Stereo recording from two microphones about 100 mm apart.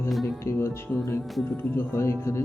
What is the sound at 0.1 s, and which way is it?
Speech, centre (ahead or behind).